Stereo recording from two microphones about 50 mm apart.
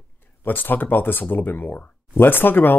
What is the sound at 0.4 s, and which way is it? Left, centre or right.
Speech, left.